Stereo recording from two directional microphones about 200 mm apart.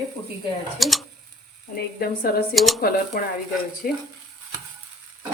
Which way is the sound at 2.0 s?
50° left (ahead or behind).